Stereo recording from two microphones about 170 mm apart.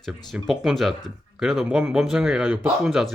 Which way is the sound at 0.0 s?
Centre (ahead or behind).